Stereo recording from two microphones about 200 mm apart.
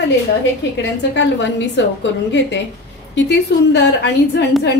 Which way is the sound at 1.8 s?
65° left (ahead or behind).